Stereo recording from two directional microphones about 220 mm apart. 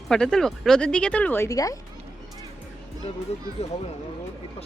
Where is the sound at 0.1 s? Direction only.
5° left (ahead or behind).